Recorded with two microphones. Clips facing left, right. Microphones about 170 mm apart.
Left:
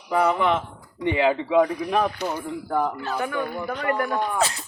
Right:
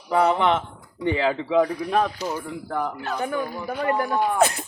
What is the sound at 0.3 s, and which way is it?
Speech, 30° right (ahead or behind).